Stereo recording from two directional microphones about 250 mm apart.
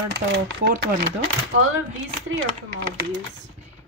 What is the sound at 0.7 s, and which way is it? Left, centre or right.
Speech, right.